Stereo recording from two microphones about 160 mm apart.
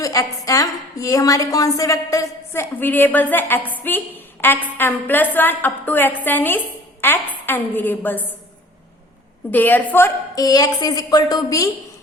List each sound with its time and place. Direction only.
0.0 s a woman's voice: 20° left (ahead or behind)
9.5 s a woman's voice: 10° left (ahead or behind)